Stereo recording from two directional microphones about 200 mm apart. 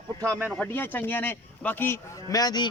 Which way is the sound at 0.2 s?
10° right (ahead or behind).